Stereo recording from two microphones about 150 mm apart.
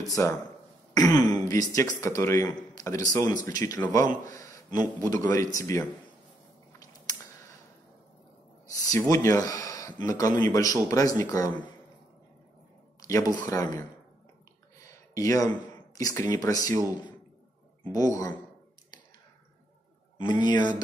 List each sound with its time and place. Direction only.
0.1 s speech: 20° left (ahead or behind)
8.6 s a sound: 25° left (ahead or behind)
9.1 s speech: 20° left (ahead or behind)
13.0 s speech: 20° left (ahead or behind)
17.9 s speech: 25° left (ahead or behind)
20.2 s speech: 30° left (ahead or behind)